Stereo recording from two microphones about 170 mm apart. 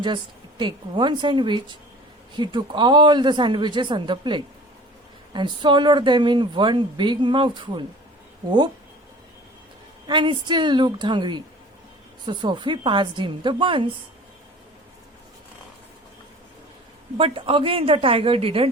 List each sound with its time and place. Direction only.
0.6 s speech: 30° right (ahead or behind)
10.1 s speech: 25° right (ahead or behind)
17.2 s a woman's voice: 30° right (ahead or behind)